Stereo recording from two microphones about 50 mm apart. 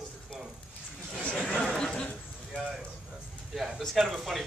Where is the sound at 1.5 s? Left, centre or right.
Centre.